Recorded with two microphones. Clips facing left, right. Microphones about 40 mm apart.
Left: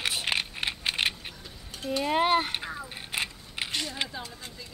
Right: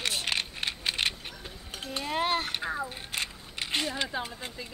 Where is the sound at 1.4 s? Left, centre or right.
Right.